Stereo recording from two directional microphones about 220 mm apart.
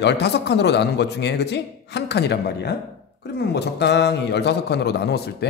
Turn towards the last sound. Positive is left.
turn(degrees=50)  # may be behind; listen again after turning